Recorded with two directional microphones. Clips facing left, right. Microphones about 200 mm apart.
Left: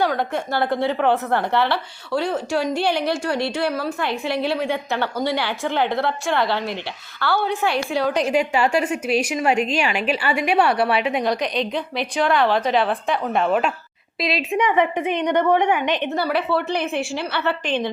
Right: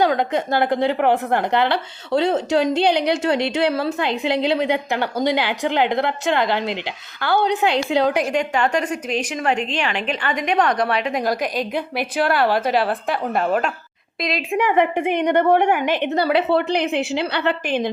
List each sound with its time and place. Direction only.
0.0 s a woman's voice: 20° right (ahead or behind)
8.3 s a woman's voice: 5° left (ahead or behind)
15.0 s a woman's voice: 10° right (ahead or behind)